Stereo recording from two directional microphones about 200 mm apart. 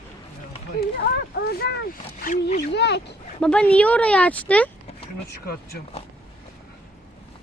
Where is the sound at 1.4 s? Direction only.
50° left (ahead or behind).